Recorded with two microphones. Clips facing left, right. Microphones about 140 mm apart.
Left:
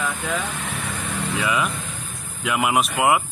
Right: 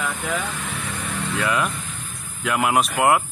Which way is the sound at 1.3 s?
Centre (ahead or behind).